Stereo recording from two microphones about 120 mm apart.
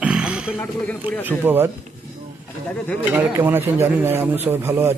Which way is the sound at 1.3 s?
15° right (ahead or behind).